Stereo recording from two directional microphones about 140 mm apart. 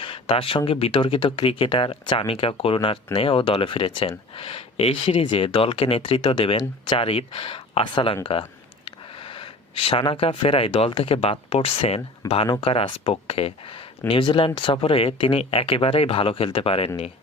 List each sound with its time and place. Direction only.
0.0 s speech: 40° left (ahead or behind)